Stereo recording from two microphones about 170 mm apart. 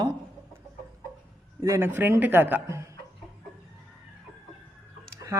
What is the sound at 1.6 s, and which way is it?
A woman's voice, 15° right (ahead or behind).